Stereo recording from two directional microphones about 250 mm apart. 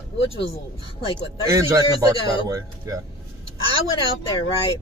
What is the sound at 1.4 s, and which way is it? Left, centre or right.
Speech, centre.